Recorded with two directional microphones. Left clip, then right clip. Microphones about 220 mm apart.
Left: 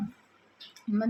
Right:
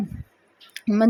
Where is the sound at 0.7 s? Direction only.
35° right (ahead or behind).